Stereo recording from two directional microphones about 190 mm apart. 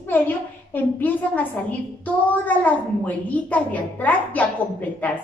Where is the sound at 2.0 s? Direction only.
10° left (ahead or behind).